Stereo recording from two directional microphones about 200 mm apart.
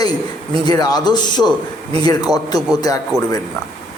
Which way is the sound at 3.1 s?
15° right (ahead or behind).